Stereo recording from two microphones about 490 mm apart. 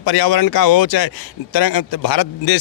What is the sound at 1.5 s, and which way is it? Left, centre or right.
Speech, left.